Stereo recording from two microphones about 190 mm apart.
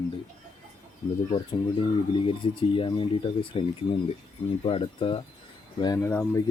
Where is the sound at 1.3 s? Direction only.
25° left (ahead or behind).